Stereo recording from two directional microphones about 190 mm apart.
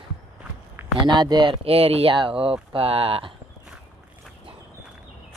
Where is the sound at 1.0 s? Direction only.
25° right (ahead or behind).